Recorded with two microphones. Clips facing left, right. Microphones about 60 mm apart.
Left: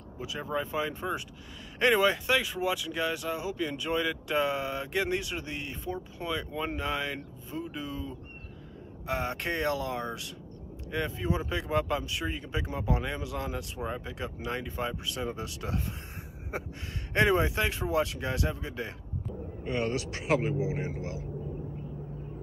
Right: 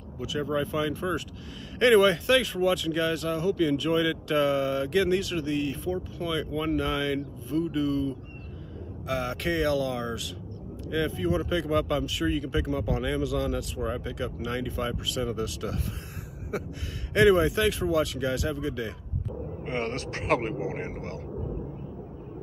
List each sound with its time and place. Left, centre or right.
0.2 s speech: left
17.1 s speech: left
19.6 s speech: right